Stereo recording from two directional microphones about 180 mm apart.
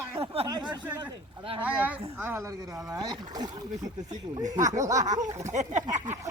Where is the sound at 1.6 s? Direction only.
10° right (ahead or behind).